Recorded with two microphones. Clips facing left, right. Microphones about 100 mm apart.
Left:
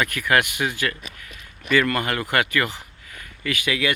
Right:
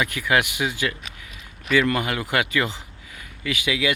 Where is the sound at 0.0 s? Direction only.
15° right (ahead or behind).